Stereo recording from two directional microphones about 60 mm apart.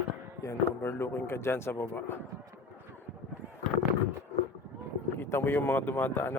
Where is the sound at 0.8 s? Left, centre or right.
Left.